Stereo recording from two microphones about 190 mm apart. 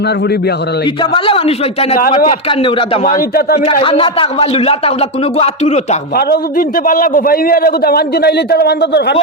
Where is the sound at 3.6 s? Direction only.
30° left (ahead or behind).